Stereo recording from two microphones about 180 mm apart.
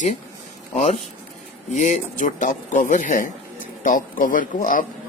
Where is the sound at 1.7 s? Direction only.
45° left (ahead or behind).